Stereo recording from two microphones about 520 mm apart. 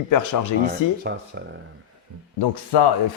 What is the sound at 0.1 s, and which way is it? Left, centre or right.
Speech, left.